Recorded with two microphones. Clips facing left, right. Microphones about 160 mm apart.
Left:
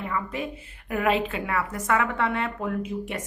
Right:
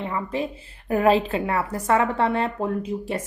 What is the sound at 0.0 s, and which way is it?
A woman's voice, 30° right (ahead or behind).